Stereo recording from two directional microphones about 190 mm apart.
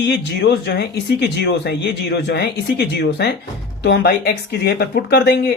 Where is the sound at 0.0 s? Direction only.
65° left (ahead or behind).